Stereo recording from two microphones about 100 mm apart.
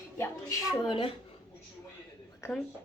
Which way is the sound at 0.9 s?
60° left (ahead or behind).